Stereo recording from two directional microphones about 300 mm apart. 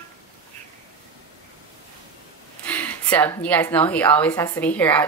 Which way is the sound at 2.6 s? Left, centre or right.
Centre.